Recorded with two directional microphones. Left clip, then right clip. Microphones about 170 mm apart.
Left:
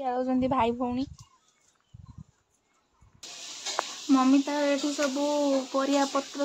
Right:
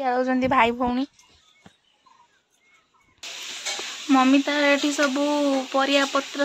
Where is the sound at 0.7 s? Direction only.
5° right (ahead or behind).